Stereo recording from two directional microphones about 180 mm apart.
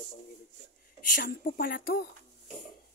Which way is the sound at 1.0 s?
50° left (ahead or behind).